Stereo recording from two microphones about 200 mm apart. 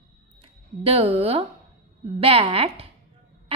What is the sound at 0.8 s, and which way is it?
A woman's voice, 30° right (ahead or behind).